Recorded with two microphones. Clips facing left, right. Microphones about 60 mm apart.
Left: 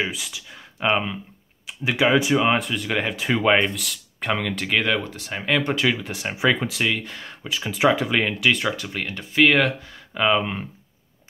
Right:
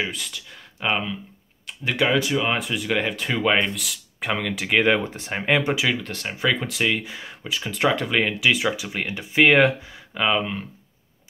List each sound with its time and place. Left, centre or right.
0.0 s speech: centre
2.1 s speech: centre
2.5 s speech: centre
4.8 s speech: right
5.8 s speech: centre
6.7 s speech: centre
10.1 s speech: centre